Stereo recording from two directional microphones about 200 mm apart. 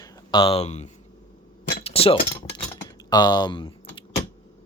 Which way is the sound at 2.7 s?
20° left (ahead or behind).